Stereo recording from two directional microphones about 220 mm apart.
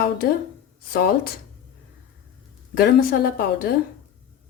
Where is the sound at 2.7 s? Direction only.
40° left (ahead or behind).